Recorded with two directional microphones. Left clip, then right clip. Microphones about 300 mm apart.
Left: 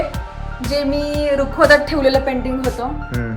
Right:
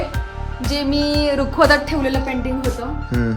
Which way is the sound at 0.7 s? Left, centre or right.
Right.